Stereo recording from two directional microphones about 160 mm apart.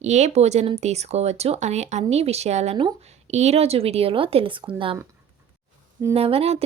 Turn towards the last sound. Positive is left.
turn(degrees=-40)  # may be behind; listen again after turning